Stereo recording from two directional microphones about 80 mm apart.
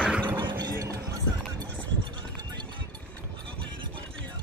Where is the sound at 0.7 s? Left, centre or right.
Right.